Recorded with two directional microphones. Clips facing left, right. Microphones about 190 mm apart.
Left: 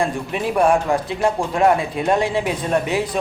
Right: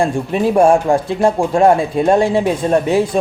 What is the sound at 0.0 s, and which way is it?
Speech, 30° right (ahead or behind).